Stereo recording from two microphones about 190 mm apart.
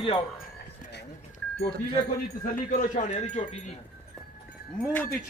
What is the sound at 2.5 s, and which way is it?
Speech, 45° left (ahead or behind).